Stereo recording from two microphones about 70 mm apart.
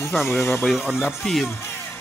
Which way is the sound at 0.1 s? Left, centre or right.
Centre.